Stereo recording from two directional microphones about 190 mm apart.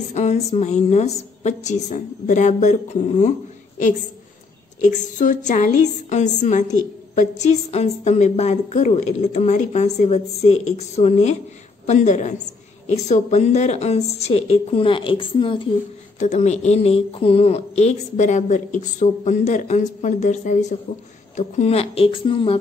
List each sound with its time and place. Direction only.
0.1 s speech: 35° left (ahead or behind)
4.9 s speech: 40° left (ahead or behind)
16.2 s speech: 35° left (ahead or behind)